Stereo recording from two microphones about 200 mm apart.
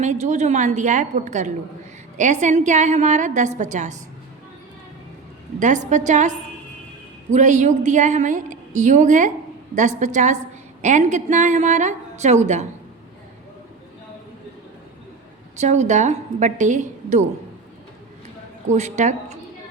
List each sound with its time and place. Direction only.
0.0 s a woman's voice: 35° right (ahead or behind)
5.5 s a woman's voice: 40° right (ahead or behind)
7.3 s a woman's voice: 35° right (ahead or behind)
15.5 s a woman's voice: 35° right (ahead or behind)
18.7 s a woman's voice: 35° right (ahead or behind)